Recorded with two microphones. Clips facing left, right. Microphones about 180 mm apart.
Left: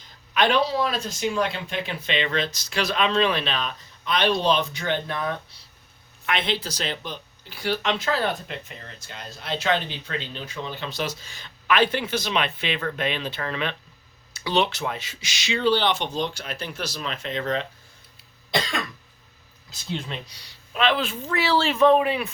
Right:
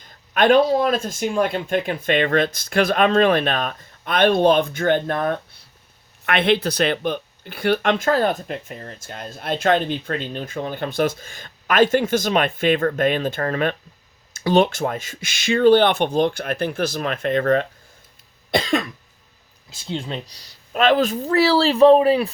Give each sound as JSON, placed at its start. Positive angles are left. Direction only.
{"t": 0.0, "sound": "speech", "side_deg": -50}
{"t": 19.7, "sound": "speech", "side_deg": -30}